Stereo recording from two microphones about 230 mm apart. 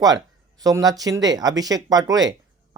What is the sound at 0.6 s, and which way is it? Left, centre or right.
Speech, centre.